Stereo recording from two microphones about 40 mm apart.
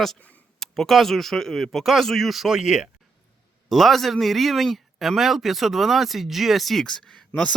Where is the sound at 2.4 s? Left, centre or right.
Centre.